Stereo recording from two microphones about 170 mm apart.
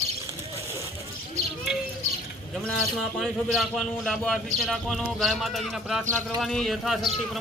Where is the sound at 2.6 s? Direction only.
Centre (ahead or behind).